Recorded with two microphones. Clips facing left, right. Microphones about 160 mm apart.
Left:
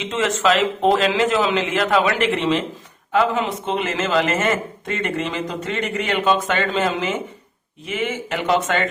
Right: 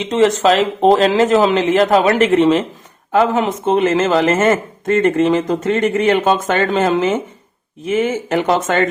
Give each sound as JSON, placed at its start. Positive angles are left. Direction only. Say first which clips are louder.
{"t": 0.0, "sound": "speech", "louder": "right 7 dB", "side_deg": -35}